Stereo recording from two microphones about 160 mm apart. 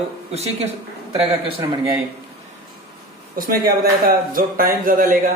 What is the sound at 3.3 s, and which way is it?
Speech, 65° right (ahead or behind).